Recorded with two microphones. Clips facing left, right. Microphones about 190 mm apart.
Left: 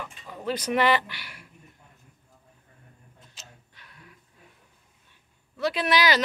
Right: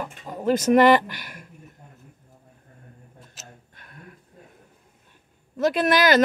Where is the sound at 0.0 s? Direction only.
45° right (ahead or behind).